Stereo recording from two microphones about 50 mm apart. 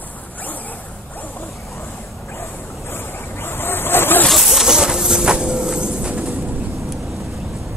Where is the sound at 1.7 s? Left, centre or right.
Left.